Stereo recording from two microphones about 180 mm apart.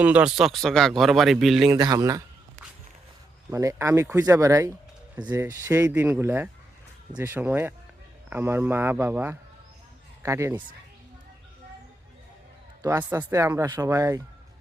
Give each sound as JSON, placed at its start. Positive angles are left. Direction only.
{"t": 0.0, "sound": "speech", "side_deg": -5}
{"t": 1.7, "sound": "speech", "side_deg": -20}
{"t": 3.5, "sound": "speech", "side_deg": -15}
{"t": 13.0, "sound": "speech", "side_deg": -10}